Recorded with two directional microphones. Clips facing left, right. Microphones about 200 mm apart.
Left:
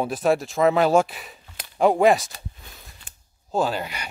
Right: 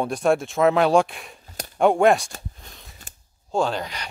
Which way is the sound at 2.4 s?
Centre (ahead or behind).